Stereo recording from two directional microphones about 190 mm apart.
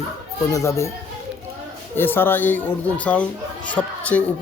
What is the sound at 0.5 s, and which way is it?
Speech, 15° left (ahead or behind).